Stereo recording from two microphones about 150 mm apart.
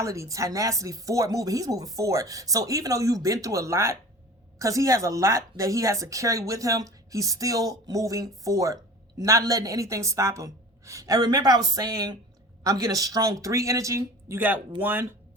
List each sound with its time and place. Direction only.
0.0 s speech: 20° right (ahead or behind)